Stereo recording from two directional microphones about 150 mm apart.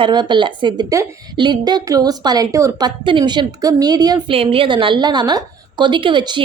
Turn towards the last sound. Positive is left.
turn(degrees=-30)  # may be behind; listen again after turning